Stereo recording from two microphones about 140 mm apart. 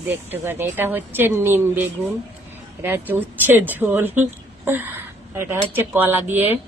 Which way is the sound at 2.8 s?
15° right (ahead or behind).